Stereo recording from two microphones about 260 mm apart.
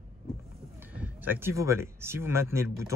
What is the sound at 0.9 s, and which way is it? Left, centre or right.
Speech, centre.